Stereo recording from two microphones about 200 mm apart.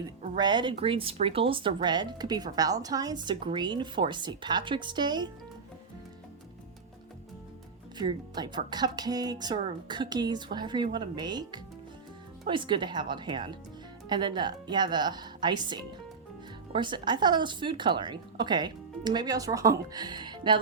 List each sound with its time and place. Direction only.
0.3 s speech: 20° right (ahead or behind)
7.9 s speech: 20° right (ahead or behind)